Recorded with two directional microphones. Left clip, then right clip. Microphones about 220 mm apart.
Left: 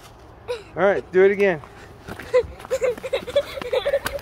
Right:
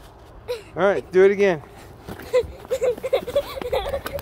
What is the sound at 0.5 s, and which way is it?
Speech, 10° right (ahead or behind).